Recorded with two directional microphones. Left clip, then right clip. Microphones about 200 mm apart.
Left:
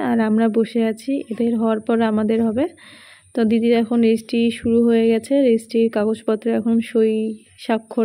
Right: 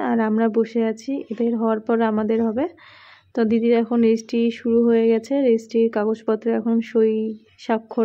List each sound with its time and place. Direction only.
0.0 s speech: 20° left (ahead or behind)